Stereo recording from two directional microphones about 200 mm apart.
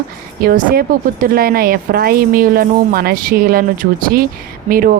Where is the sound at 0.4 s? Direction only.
50° right (ahead or behind).